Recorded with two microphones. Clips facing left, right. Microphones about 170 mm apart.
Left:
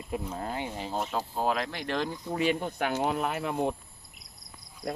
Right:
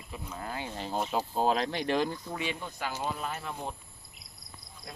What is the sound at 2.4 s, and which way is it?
Speech, 50° left (ahead or behind).